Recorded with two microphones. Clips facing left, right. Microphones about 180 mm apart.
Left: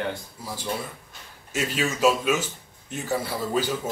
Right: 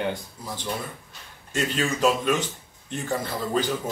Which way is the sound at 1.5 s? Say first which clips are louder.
Right 1 dB; 5° left (ahead or behind).